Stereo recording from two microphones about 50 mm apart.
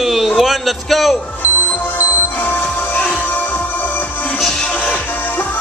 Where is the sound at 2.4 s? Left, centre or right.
Left.